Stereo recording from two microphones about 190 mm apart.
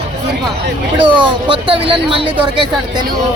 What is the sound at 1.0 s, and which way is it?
Speech, 25° right (ahead or behind).